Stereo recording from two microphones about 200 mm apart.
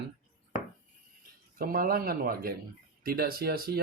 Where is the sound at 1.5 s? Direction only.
45° right (ahead or behind).